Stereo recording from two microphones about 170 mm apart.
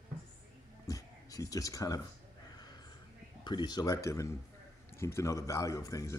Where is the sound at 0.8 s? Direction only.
20° left (ahead or behind).